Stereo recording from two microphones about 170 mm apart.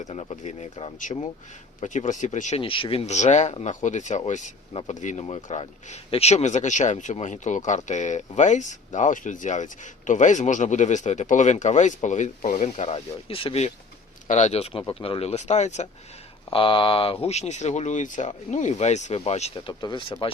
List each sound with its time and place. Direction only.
0.0 s speech: 40° left (ahead or behind)
2.6 s speech: 30° left (ahead or behind)
16.5 s speech: 30° left (ahead or behind)